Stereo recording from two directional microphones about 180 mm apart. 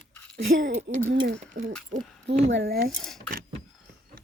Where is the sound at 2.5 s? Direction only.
65° right (ahead or behind).